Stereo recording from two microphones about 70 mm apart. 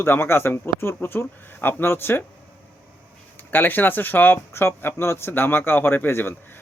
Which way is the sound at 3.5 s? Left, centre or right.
Left.